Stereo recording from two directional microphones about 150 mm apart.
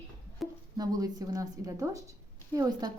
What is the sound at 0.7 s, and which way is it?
A woman's voice, 25° right (ahead or behind).